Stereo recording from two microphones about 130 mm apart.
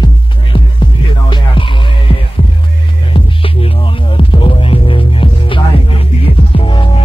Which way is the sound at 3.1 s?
45° left (ahead or behind).